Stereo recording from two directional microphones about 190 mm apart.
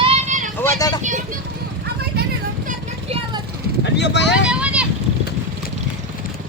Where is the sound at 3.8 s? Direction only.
65° left (ahead or behind).